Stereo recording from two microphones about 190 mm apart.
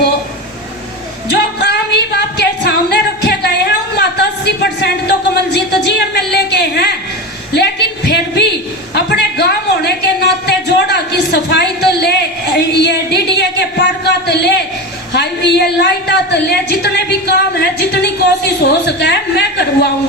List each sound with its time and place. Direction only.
1.3 s speech: 60° left (ahead or behind)
2.1 s singing: 60° left (ahead or behind)
3.9 s a man's voice: 60° left (ahead or behind)